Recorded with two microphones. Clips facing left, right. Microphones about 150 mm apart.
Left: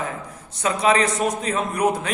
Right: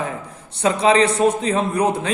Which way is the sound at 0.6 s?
30° right (ahead or behind).